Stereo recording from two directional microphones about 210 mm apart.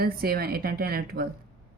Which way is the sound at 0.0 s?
45° right (ahead or behind).